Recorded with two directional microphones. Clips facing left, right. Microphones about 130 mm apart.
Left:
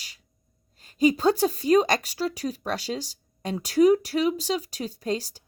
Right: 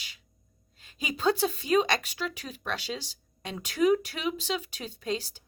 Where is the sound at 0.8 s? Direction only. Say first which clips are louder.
Left 12 dB; 40° left (ahead or behind).